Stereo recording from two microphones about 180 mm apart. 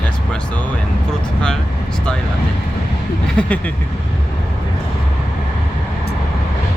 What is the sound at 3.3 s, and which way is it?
Vehicle, 5° left (ahead or behind).